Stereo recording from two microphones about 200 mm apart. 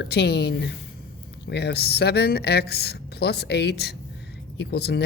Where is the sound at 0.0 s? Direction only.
55° left (ahead or behind).